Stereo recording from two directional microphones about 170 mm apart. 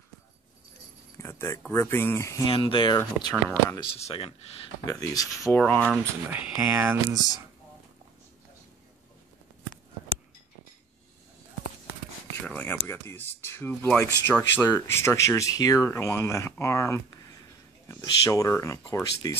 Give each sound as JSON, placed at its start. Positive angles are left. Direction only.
{"t": 1.1, "sound": "speech", "side_deg": 15}
{"t": 2.5, "sound": "speech", "side_deg": 30}
{"t": 4.8, "sound": "speech", "side_deg": 20}
{"t": 5.8, "sound": "speech", "side_deg": -10}
{"t": 12.4, "sound": "a sound", "side_deg": 10}
{"t": 12.8, "sound": "speech", "side_deg": 15}